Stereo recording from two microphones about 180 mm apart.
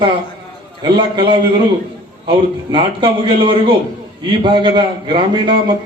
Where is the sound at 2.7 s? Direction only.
30° right (ahead or behind).